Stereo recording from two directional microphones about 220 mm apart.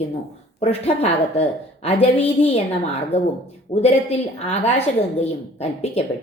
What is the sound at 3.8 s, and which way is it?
A woman's voice, 30° left (ahead or behind).